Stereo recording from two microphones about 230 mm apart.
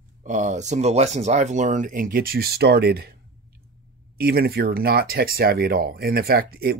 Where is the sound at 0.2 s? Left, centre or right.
Right.